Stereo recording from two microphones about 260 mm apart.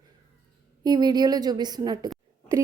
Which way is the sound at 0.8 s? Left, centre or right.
Centre.